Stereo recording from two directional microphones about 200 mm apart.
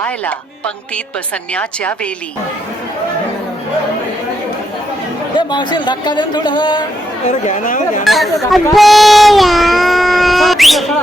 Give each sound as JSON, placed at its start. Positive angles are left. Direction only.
{"t": 1.5, "sound": "a woman's voice", "side_deg": 5}
{"t": 5.4, "sound": "a man's voice", "side_deg": 20}
{"t": 7.3, "sound": "speech", "side_deg": 35}
{"t": 8.0, "sound": "speech", "side_deg": 0}